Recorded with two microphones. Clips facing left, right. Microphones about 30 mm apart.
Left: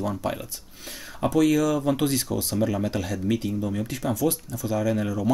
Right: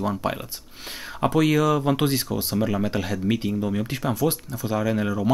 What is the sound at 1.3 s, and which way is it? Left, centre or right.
Speech, right.